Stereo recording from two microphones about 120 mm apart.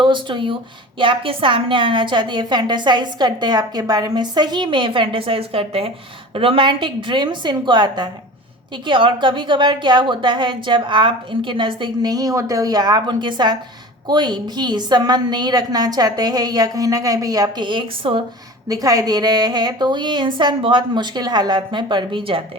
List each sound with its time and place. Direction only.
0.0 s a woman's voice: 40° right (ahead or behind)
18.7 s a woman's voice: 30° right (ahead or behind); by 22.4 s 45° right (ahead or behind)